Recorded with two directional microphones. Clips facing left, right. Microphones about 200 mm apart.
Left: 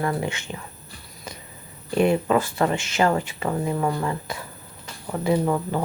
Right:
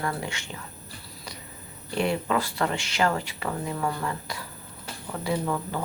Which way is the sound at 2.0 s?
20° left (ahead or behind).